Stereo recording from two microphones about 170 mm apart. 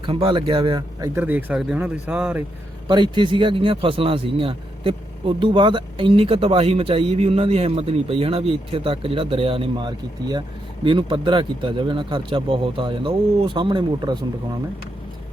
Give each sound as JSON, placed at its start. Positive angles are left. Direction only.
{"t": 0.0, "sound": "speech", "side_deg": -30}
{"t": 1.1, "sound": "speech", "side_deg": -10}
{"t": 2.8, "sound": "a man's voice", "side_deg": -25}